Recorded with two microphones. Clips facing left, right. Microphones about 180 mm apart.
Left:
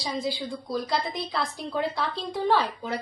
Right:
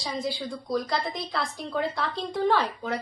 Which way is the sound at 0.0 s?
Centre (ahead or behind).